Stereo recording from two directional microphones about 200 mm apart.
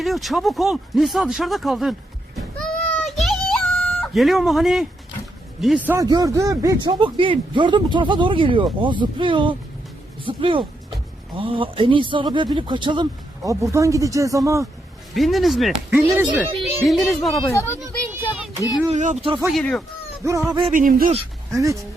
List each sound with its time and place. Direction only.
0.0 s speech: centre (ahead or behind)
2.6 s whimper: centre (ahead or behind)
5.5 s speech: 5° right (ahead or behind)
15.1 s speech: centre (ahead or behind)
17.5 s speech: 15° left (ahead or behind)
18.1 s a sound: 10° right (ahead or behind)
18.9 s speech: 35° right (ahead or behind)
19.5 s speech: 5° left (ahead or behind)
20.2 s speech: 15° right (ahead or behind)
20.7 s speech: 45° right (ahead or behind)
21.5 s speech: 15° right (ahead or behind)